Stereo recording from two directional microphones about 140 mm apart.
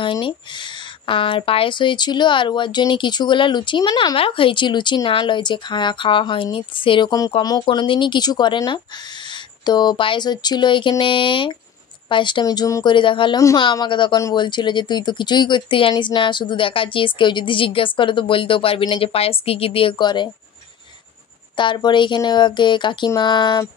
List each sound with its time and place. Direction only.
0.0 s speech: 35° left (ahead or behind)
12.9 s speech: 35° left (ahead or behind)
21.5 s speech: 35° left (ahead or behind)